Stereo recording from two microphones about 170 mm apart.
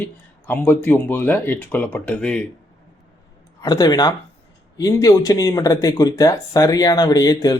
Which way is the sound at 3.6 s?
20° left (ahead or behind).